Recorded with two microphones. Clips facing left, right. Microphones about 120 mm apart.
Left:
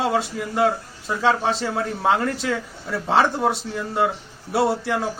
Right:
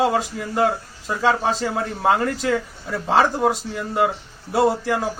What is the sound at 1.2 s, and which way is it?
Speech, 15° right (ahead or behind).